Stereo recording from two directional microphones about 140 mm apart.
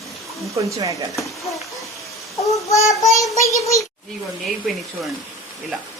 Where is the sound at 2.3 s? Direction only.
25° left (ahead or behind).